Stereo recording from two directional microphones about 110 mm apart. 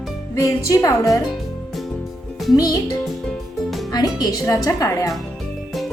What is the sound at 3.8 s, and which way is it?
Speech, 35° left (ahead or behind).